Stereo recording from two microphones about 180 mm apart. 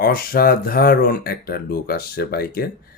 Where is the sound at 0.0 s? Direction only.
55° left (ahead or behind).